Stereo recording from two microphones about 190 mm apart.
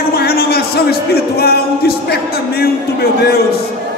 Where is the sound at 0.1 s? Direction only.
55° left (ahead or behind).